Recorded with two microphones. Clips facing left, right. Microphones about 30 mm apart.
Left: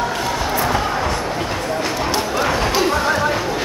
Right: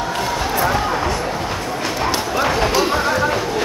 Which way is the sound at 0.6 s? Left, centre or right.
Centre.